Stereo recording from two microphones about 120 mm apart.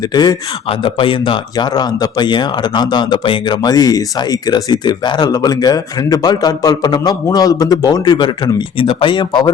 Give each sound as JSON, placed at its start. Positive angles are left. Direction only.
{"t": 0.1, "sound": "a man's voice", "side_deg": 35}
{"t": 0.7, "sound": "a man's voice", "side_deg": 45}